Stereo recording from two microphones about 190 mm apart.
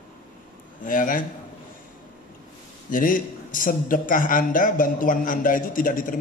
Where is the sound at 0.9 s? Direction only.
45° left (ahead or behind).